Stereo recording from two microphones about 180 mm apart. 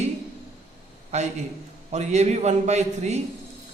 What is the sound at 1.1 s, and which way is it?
A man's voice, 40° right (ahead or behind).